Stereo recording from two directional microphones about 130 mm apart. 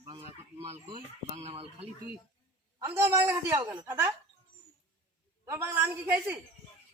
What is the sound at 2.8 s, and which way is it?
A man's voice, 20° right (ahead or behind).